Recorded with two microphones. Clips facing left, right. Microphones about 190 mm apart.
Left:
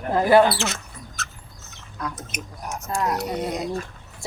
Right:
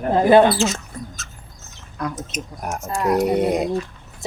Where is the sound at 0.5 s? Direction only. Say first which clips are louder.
Right 7 dB; 65° left (ahead or behind).